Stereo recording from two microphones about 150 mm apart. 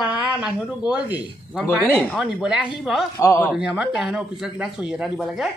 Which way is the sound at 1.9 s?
10° left (ahead or behind).